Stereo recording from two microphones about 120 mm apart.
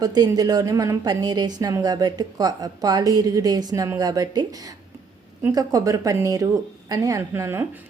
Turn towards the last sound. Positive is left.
turn(degrees=-20)  # may be behind; listen again after turning